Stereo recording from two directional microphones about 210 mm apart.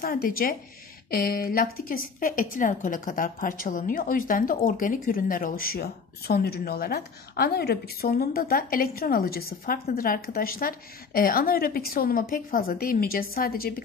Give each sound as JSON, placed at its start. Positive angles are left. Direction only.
{"t": 0.0, "sound": "a woman's voice", "side_deg": 45}